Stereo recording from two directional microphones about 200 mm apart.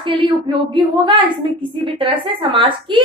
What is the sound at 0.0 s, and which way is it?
A woman's voice, 25° right (ahead or behind).